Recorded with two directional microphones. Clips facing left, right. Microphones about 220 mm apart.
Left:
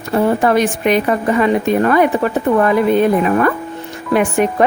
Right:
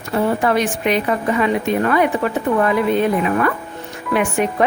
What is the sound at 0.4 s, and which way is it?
A woman's voice, 45° left (ahead or behind).